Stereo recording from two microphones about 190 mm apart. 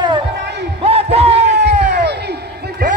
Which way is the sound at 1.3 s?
65° right (ahead or behind).